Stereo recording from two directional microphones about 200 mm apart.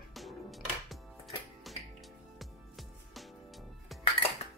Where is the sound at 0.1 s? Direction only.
Centre (ahead or behind).